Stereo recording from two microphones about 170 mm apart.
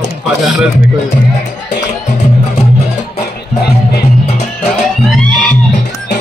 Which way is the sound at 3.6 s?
70° left (ahead or behind).